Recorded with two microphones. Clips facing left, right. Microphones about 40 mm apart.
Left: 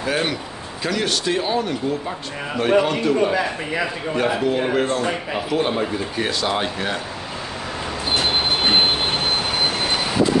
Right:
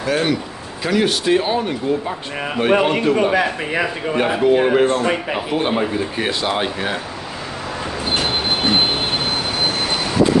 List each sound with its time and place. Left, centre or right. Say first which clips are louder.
0.0 s speech: right 4 dB; centre
0.8 s a man's voice: right 5 dB; centre; by 3.8 s right
4.1 s speech: right 5 dB; right
5.3 s speech: right 2 dB; right